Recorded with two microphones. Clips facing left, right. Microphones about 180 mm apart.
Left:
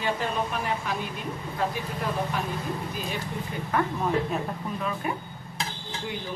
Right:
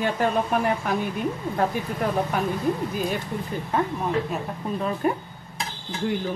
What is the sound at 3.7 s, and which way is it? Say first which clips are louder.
Speech: right 1 dB; 25° right (ahead or behind).